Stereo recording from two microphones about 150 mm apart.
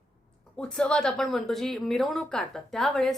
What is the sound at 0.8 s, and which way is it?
A woman's voice, 5° left (ahead or behind).